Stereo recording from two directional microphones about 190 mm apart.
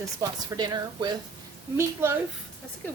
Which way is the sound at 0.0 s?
20° right (ahead or behind).